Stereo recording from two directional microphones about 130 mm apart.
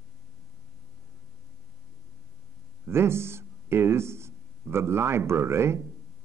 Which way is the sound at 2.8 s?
20° right (ahead or behind).